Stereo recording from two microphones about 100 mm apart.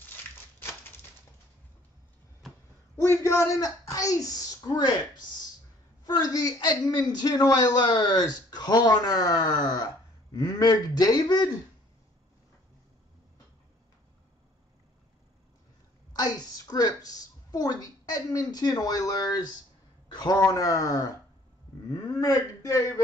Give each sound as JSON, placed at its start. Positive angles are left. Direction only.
{"t": 2.4, "sound": "a sound", "side_deg": 0}
{"t": 3.0, "sound": "speech", "side_deg": 25}
{"t": 6.0, "sound": "speech", "side_deg": 40}
{"t": 16.1, "sound": "a woman's voice", "side_deg": 40}